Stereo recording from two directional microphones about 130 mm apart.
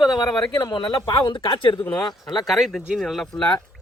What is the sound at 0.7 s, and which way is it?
A man's voice, 35° left (ahead or behind).